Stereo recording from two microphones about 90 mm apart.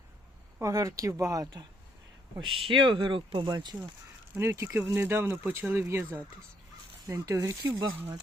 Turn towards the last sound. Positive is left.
turn(degrees=-35)  # may be behind; listen again after turning